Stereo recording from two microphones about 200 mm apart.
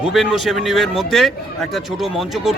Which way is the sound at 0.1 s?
Centre (ahead or behind).